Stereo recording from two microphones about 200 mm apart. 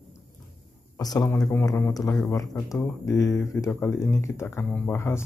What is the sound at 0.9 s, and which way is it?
Speech, 20° left (ahead or behind).